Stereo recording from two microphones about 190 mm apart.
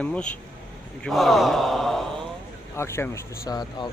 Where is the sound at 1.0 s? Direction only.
Centre (ahead or behind).